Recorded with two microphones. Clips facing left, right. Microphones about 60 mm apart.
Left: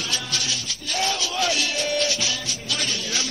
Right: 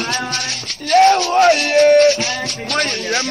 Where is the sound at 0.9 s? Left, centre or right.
Right.